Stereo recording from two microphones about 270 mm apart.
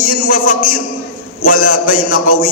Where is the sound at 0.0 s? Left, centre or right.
Left.